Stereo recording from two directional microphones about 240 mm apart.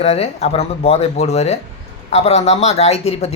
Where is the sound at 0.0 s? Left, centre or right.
Left.